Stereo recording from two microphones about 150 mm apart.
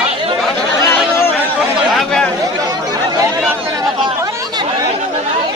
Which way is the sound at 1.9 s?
5° left (ahead or behind).